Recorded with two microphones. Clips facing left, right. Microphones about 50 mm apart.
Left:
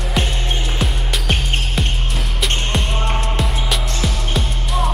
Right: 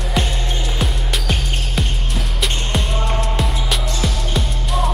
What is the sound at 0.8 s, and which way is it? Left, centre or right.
Music, centre.